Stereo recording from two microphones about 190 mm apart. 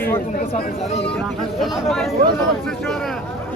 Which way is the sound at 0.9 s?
35° left (ahead or behind).